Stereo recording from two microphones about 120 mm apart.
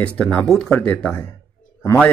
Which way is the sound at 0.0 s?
10° left (ahead or behind).